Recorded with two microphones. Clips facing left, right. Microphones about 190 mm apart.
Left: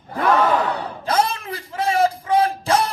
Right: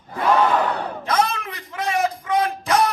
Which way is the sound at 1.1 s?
30° left (ahead or behind).